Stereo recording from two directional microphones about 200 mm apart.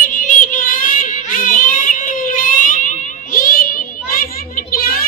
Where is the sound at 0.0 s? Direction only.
40° left (ahead or behind).